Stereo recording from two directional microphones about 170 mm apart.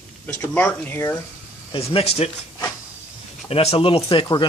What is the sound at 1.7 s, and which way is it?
Speech, 35° left (ahead or behind).